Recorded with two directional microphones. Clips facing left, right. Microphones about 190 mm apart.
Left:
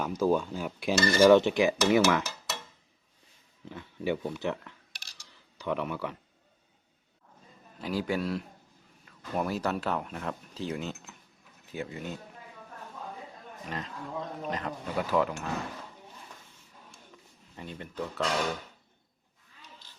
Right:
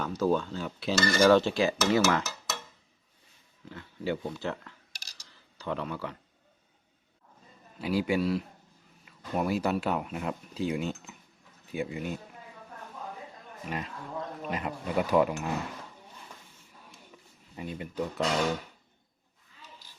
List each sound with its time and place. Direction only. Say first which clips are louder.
0.0 s cutlery: left 1 dB; 10° left (ahead or behind)
3.7 s cutlery: left 1 dB; 20° left (ahead or behind)
4.9 s a sound: even; 35° right (ahead or behind)
5.5 s speech: left 2 dB; 15° left (ahead or behind)
7.8 s speech: right 3 dB; 10° right (ahead or behind)
13.7 s speech: right 1 dB; 10° right (ahead or behind)
17.6 s speech: right 3 dB; 10° right (ahead or behind)